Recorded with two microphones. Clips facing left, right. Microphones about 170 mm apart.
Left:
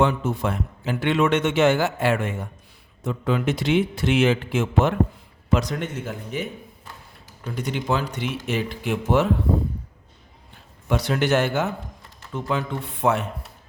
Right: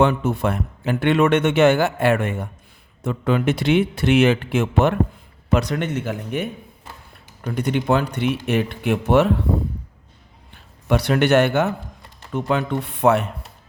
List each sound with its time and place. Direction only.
0.0 s speech: 65° right (ahead or behind)
10.8 s speech: 65° right (ahead or behind)